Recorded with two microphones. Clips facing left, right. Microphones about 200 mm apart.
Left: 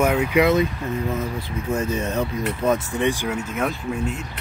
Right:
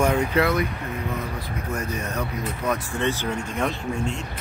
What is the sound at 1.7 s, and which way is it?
Speech, 25° left (ahead or behind).